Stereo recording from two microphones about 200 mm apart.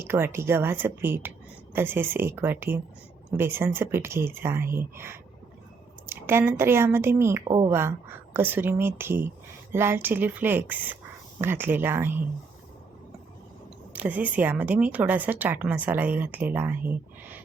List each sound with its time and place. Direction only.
0.0 s speech: 10° right (ahead or behind)
13.9 s speech: 5° right (ahead or behind)